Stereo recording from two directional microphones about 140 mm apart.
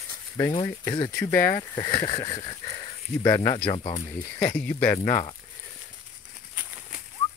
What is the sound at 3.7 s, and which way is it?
Speech, 40° left (ahead or behind).